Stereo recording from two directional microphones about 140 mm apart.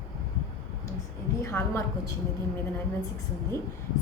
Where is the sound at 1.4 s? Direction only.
20° left (ahead or behind).